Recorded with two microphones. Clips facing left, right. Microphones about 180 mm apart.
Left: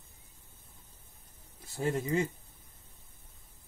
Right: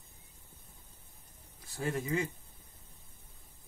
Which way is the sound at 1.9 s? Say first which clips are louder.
Left 3 dB; 25° left (ahead or behind).